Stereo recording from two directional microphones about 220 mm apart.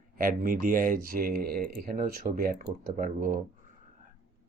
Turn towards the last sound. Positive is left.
turn(degrees=-40)  # may be behind; listen again after turning